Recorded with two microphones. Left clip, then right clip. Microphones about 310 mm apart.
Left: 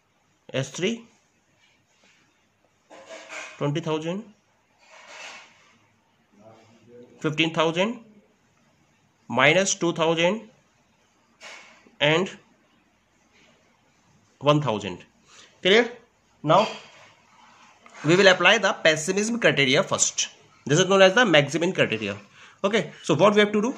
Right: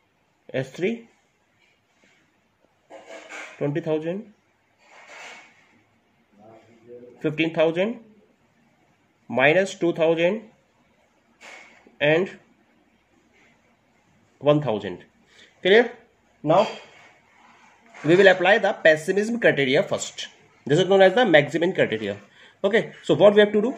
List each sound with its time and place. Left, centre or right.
0.5 s speech: left
3.5 s speech: left
7.2 s speech: left
9.3 s speech: left
12.0 s speech: left
14.4 s a sound: left
16.7 s a sound: centre
18.0 s speech: left